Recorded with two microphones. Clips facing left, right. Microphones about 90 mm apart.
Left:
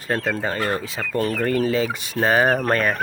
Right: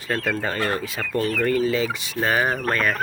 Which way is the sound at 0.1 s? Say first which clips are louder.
Left 1 dB; 30° left (ahead or behind).